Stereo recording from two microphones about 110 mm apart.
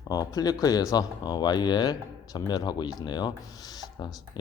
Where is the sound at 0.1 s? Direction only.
35° left (ahead or behind).